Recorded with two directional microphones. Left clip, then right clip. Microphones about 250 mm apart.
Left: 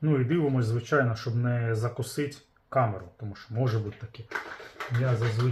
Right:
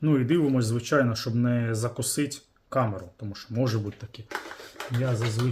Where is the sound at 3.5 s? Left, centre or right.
Right.